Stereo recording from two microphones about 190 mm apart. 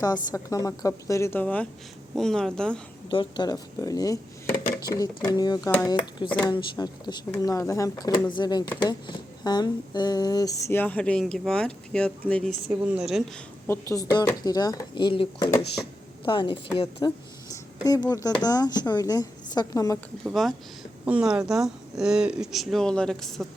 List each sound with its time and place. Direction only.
0.0 s speech: 20° left (ahead or behind); by 2.8 s 5° left (ahead or behind)
3.1 s speech: 25° left (ahead or behind); by 12.5 s 5° left (ahead or behind)
12.8 s speech: 5° right (ahead or behind)
13.7 s speech: 15° left (ahead or behind)
20.2 s speech: centre (ahead or behind)